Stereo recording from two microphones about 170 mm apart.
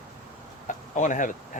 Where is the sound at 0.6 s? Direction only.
50° left (ahead or behind).